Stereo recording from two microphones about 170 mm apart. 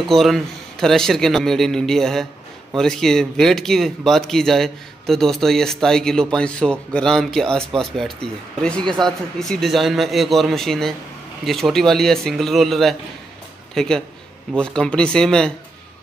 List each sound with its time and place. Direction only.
0.0 s speech: centre (ahead or behind)